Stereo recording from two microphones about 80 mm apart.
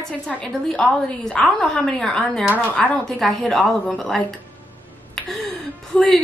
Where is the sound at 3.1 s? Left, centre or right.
Centre.